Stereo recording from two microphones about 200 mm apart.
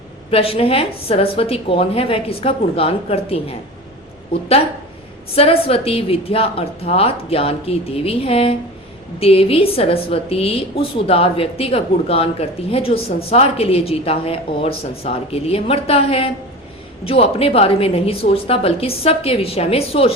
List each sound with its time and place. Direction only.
0.3 s a woman's voice: 30° left (ahead or behind)
5.3 s a woman's voice: 30° left (ahead or behind)